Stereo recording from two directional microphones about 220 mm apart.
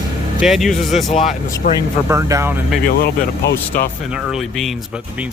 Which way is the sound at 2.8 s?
45° left (ahead or behind).